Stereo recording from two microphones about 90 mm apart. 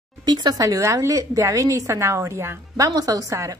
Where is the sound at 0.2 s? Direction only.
50° right (ahead or behind); by 2.6 s 30° right (ahead or behind).